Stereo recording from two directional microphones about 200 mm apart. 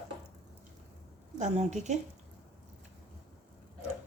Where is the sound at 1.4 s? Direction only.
35° right (ahead or behind).